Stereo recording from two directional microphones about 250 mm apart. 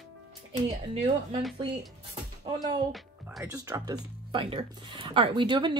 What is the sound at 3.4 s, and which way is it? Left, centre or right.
Speech, centre.